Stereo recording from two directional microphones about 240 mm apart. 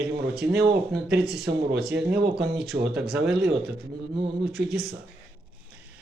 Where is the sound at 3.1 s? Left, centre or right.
Centre.